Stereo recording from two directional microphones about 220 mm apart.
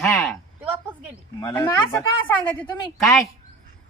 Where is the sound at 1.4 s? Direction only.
15° left (ahead or behind).